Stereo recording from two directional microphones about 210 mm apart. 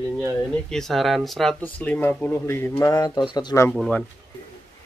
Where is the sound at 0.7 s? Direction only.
Centre (ahead or behind).